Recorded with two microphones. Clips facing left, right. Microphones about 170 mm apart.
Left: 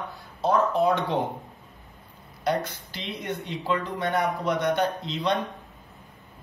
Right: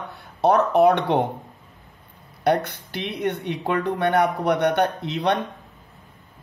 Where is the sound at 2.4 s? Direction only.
65° right (ahead or behind).